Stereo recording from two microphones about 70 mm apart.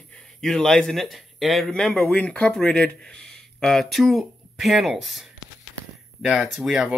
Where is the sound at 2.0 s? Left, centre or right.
Left.